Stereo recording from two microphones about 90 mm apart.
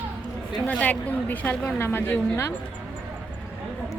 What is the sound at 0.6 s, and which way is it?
A woman's voice, 15° left (ahead or behind).